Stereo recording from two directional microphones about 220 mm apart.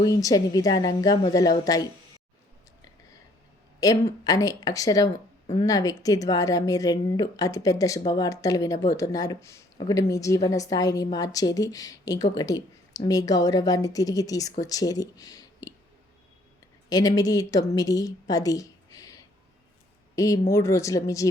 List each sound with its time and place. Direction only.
0.0 s speech: 15° left (ahead or behind)
3.8 s speech: 15° left (ahead or behind)
16.9 s speech: 15° left (ahead or behind)